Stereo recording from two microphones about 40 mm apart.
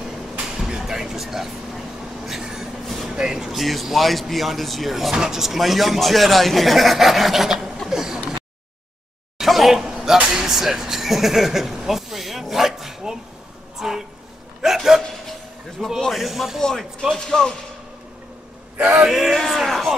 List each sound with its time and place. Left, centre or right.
0.6 s vehicle: centre
2.4 s train: centre
2.9 s a sound: centre
3.2 s speech: centre
5.1 s speech: centre
7.9 s a sound: centre
9.4 s a sound: centre
10.2 s speech: centre
17.1 s speech: centre
18.9 s speech: centre
19.3 s speech: centre